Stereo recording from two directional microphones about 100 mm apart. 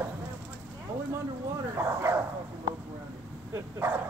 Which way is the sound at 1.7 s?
25° right (ahead or behind).